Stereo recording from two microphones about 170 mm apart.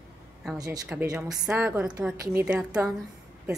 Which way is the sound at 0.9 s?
10° right (ahead or behind).